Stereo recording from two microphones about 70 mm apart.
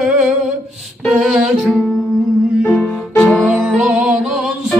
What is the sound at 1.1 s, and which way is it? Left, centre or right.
Music, centre.